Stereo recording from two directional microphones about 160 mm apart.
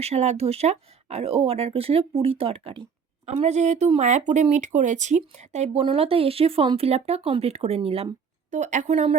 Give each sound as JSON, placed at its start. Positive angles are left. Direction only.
{"t": 0.0, "sound": "speech", "side_deg": -40}